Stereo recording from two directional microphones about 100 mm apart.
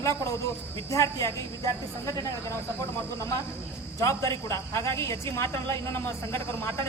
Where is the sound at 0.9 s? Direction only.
30° left (ahead or behind).